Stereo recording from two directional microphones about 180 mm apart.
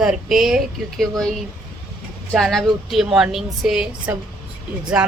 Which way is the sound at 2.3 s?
Centre (ahead or behind).